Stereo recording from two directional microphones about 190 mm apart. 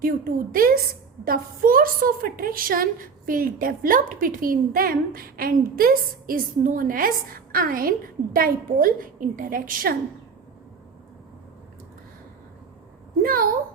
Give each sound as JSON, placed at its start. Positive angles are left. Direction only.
{"t": 0.0, "sound": "a woman's voice", "side_deg": -50}
{"t": 13.2, "sound": "a woman's voice", "side_deg": -50}